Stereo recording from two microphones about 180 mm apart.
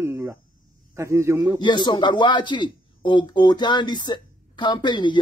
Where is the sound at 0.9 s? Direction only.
15° right (ahead or behind).